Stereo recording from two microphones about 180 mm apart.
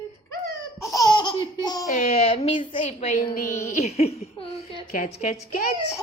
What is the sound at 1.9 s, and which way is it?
Speech, 40° left (ahead or behind).